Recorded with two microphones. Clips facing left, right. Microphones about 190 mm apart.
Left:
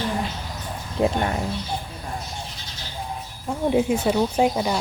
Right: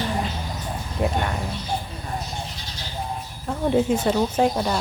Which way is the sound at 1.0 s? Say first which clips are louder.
Left 3 dB; 15° left (ahead or behind).